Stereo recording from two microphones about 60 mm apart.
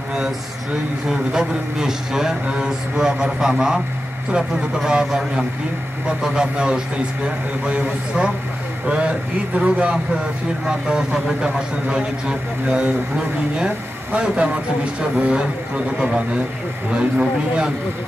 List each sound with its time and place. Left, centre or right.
1.0 s a man's voice: centre
14.1 s a man's voice: centre